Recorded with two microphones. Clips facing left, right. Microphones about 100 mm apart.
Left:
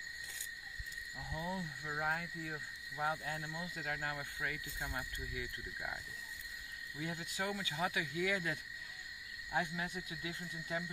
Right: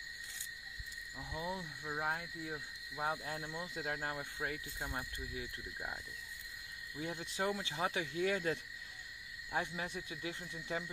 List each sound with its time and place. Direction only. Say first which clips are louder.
1.3 s speech: even; 15° right (ahead or behind)
7.0 s speech: right 2 dB; 25° right (ahead or behind)
9.5 s speech: left 1 dB; 20° right (ahead or behind)